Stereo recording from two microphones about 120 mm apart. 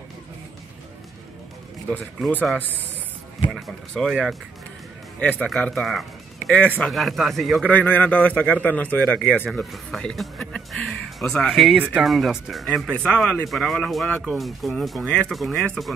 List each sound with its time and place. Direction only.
3.5 s a man's voice: centre (ahead or behind)
7.7 s speech: 15° left (ahead or behind)